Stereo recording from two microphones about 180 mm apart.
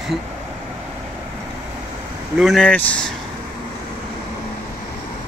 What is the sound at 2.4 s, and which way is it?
Speech, 5° left (ahead or behind).